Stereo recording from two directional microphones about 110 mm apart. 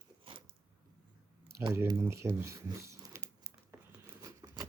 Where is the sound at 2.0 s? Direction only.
25° right (ahead or behind).